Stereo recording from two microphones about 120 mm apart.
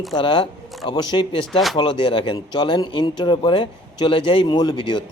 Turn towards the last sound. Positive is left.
turn(degrees=35)  # may be behind; listen again after turning